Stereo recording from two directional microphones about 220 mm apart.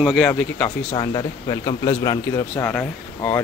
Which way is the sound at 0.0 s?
Centre (ahead or behind).